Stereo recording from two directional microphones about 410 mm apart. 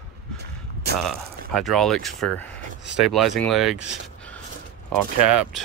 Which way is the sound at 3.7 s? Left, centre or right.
Right.